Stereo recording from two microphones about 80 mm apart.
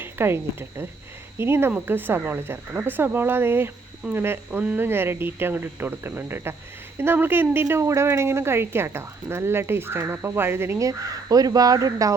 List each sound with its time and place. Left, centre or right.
0.0 s a sound: right
1.4 s a woman's voice: right
10.8 s speech: right